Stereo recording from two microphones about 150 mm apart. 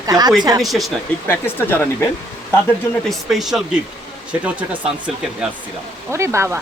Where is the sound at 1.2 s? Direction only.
15° left (ahead or behind).